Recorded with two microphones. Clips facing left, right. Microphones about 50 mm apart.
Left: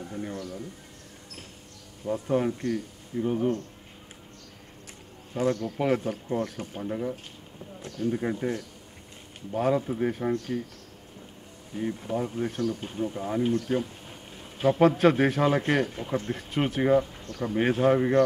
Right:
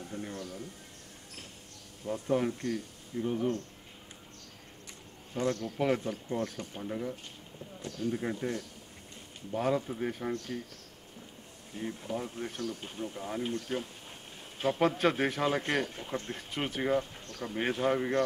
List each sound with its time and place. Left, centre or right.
0.0 s speech: centre
2.0 s a man's voice: centre
5.3 s a man's voice: centre
11.7 s a man's voice: centre